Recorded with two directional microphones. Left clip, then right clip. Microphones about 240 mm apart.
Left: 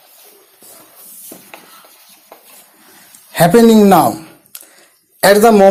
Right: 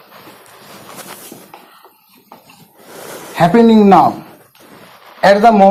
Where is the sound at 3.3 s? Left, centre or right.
Left.